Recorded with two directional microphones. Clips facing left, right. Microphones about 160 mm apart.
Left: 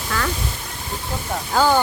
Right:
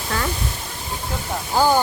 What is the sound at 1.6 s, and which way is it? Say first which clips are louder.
Speech: even; 15° right (ahead or behind).